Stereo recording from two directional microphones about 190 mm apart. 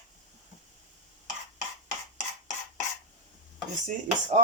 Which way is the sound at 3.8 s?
40° right (ahead or behind).